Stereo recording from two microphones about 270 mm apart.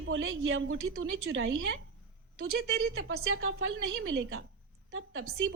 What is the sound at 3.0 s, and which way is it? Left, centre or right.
A woman's voice, right.